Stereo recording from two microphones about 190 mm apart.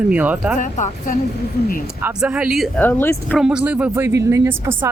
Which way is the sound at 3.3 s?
5° right (ahead or behind).